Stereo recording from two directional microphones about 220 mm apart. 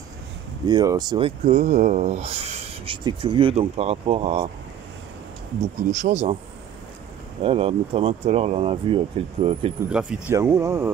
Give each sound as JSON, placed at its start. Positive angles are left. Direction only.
{"t": 0.7, "sound": "speech", "side_deg": -20}
{"t": 5.6, "sound": "speech", "side_deg": -35}
{"t": 7.4, "sound": "speech", "side_deg": -25}
{"t": 9.8, "sound": "speech", "side_deg": -5}